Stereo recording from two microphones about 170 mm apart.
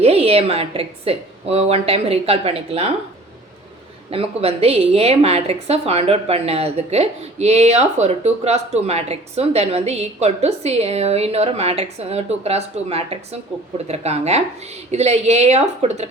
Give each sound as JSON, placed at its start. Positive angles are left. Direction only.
{"t": 0.0, "sound": "a woman's voice", "side_deg": -35}
{"t": 4.1, "sound": "a woman's voice", "side_deg": -35}